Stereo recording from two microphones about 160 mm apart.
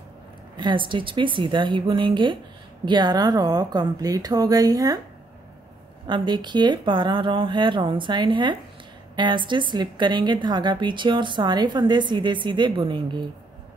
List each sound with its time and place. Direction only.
0.6 s a woman's voice: 30° right (ahead or behind)
6.0 s a woman's voice: 30° right (ahead or behind)